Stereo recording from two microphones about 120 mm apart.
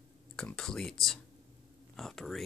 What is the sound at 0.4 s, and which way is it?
Speech, 5° left (ahead or behind).